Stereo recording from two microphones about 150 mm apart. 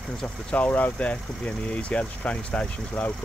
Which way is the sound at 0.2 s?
10° left (ahead or behind).